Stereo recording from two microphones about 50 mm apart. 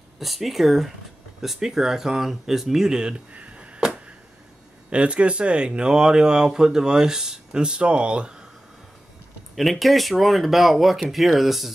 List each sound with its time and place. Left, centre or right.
0.2 s speech: centre
3.3 s a sound: right
4.8 s speech: right
9.6 s speech: centre